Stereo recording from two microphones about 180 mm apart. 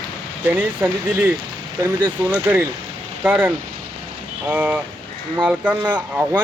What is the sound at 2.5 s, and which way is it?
Speech, 10° right (ahead or behind).